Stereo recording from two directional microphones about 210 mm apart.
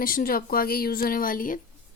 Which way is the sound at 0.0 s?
45° left (ahead or behind).